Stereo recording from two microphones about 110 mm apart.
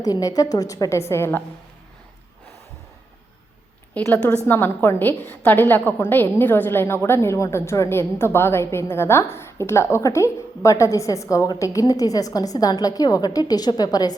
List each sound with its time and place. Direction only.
0.0 s a woman's voice: 30° left (ahead or behind)
4.0 s a woman's voice: 15° left (ahead or behind); by 14.2 s 35° left (ahead or behind)